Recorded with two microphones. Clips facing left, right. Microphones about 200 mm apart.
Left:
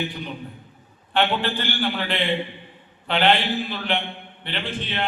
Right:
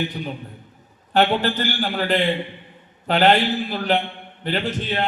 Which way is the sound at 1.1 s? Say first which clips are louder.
Right 4 dB; 40° right (ahead or behind).